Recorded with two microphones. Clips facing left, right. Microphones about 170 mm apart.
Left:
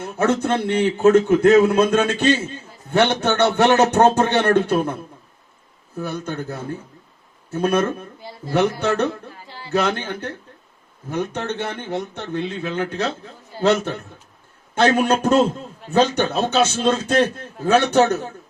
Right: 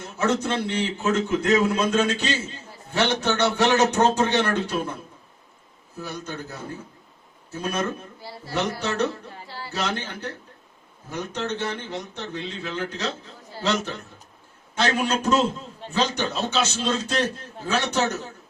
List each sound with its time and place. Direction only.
0.0 s a man's voice: 55° left (ahead or behind)
6.0 s a man's voice: 55° left (ahead or behind)